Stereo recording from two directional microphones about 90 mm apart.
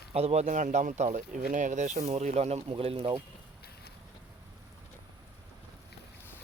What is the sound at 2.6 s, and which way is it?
Speech, 85° right.